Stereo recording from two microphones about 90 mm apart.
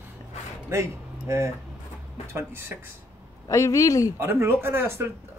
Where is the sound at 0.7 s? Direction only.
30° right (ahead or behind).